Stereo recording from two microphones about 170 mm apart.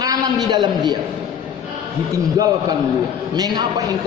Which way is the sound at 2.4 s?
20° right (ahead or behind).